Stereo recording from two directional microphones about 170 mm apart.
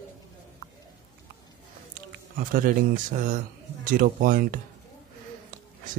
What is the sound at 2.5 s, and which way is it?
A man's voice, 55° right (ahead or behind).